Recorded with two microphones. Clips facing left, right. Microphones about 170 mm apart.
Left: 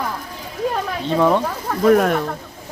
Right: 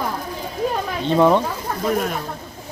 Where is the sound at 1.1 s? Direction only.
10° right (ahead or behind).